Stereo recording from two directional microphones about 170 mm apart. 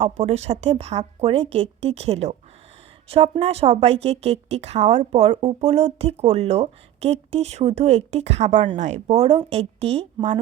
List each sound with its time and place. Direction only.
0.0 s speech: 40° right (ahead or behind)